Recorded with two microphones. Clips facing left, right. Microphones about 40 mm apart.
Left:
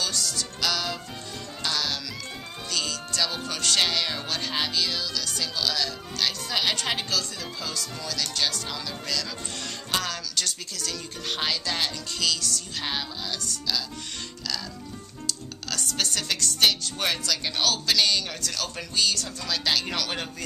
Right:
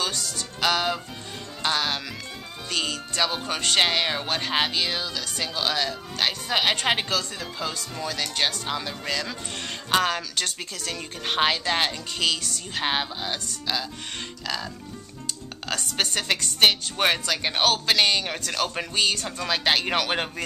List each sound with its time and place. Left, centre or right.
0.0 s speech: centre
15.7 s speech: right